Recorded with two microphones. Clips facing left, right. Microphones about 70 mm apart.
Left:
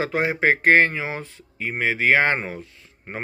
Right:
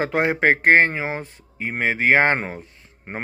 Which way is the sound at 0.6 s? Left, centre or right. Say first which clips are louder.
Even; right.